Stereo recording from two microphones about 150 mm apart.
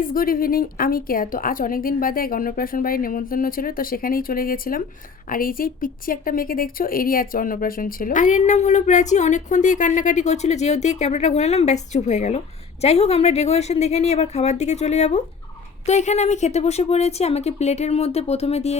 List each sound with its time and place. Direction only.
0.0 s a woman's voice: 70° left (ahead or behind); by 18.8 s 45° left (ahead or behind)